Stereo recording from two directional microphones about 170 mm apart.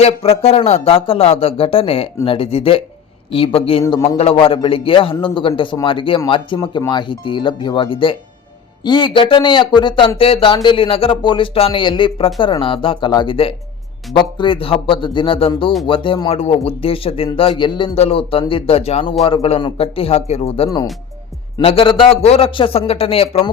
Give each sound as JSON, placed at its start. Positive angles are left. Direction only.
{"t": 0.0, "sound": "speech", "side_deg": 35}
{"t": 4.2, "sound": "speech", "side_deg": 35}